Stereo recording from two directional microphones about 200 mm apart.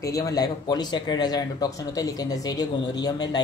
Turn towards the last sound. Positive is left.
turn(degrees=20)  # may be behind; listen again after turning